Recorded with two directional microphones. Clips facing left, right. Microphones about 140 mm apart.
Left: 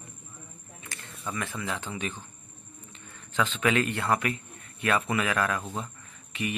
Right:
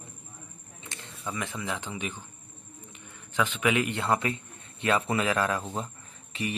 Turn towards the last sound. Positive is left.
turn(degrees=-30)  # may be behind; listen again after turning